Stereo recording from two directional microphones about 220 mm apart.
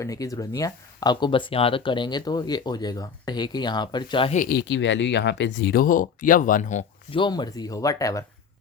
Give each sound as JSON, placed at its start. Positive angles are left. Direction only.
{"t": 0.0, "sound": "speech", "side_deg": 15}
{"t": 4.4, "sound": "speech", "side_deg": 45}
{"t": 7.2, "sound": "speech", "side_deg": 20}